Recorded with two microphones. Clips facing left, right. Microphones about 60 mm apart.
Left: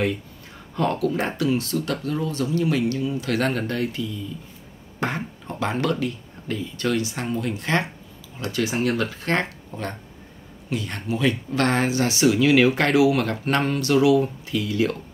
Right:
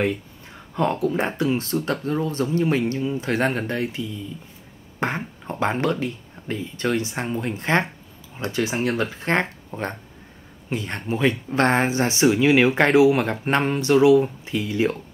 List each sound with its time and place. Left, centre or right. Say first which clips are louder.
0.7 s speech: right 1 dB; right